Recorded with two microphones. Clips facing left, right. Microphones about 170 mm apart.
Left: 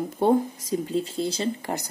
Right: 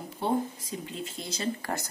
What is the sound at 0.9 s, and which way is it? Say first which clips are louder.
Speech: left 11 dB; 30° left (ahead or behind).